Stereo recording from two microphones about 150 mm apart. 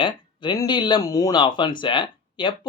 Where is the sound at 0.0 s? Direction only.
30° left (ahead or behind).